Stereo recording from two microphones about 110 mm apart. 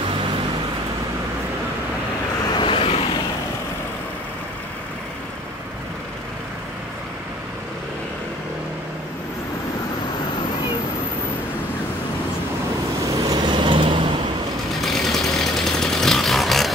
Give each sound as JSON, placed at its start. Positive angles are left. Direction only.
{"t": 2.5, "sound": "vehicle", "side_deg": 50}
{"t": 13.3, "sound": "vehicle", "side_deg": -45}
{"t": 14.8, "sound": "a sound", "side_deg": 0}